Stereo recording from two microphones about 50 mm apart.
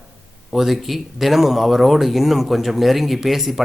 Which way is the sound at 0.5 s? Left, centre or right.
Centre.